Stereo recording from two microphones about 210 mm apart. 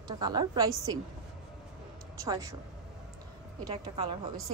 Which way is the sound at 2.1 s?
15° right (ahead or behind).